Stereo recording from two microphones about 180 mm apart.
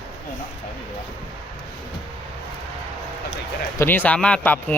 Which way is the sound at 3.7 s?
10° left (ahead or behind).